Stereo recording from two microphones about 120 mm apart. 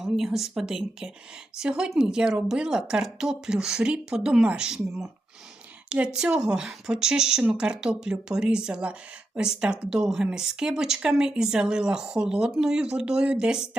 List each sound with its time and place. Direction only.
0.0 s speech: centre (ahead or behind)
6.1 s speech: 5° right (ahead or behind)